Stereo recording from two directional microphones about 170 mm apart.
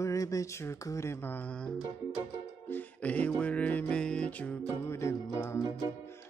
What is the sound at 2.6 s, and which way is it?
Music, 10° left (ahead or behind).